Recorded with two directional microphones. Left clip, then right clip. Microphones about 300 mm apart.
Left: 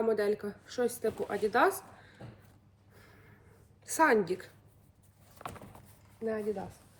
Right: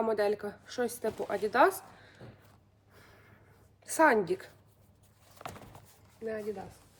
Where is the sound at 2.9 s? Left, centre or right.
Centre.